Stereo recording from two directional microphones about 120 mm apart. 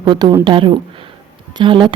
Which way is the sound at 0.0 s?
40° right (ahead or behind).